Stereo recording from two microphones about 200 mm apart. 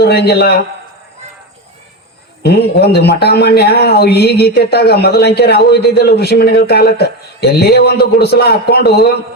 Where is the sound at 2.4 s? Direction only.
55° left (ahead or behind).